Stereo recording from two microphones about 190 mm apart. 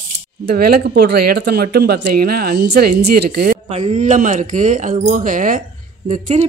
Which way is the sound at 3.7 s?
35° right (ahead or behind).